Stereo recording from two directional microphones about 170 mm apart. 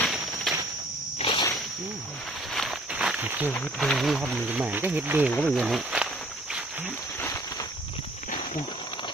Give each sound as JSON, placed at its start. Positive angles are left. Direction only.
{"t": 0.0, "sound": "a sound", "side_deg": 0}
{"t": 1.2, "sound": "whip", "side_deg": 30}
{"t": 2.5, "sound": "walk", "side_deg": 0}
{"t": 3.5, "sound": "speech", "side_deg": 5}